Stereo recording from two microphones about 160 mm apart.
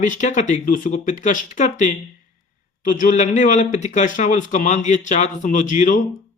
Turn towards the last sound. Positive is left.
turn(degrees=50)  # may be behind; listen again after turning